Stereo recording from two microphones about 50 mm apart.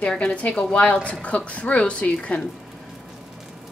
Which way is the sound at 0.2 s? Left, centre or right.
Left.